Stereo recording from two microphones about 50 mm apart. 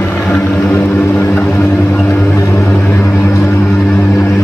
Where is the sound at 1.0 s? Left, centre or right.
Left.